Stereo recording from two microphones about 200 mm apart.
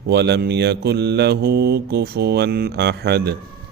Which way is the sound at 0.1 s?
55° right (ahead or behind).